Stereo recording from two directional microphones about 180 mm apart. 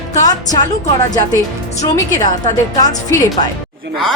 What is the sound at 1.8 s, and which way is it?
Speech, 20° left (ahead or behind).